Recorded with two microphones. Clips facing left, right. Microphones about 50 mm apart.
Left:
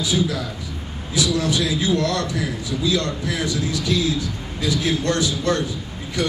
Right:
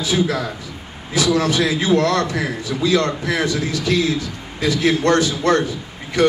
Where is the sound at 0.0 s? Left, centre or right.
Right.